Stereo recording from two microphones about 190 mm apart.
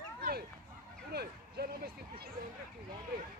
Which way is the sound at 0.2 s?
55° right (ahead or behind).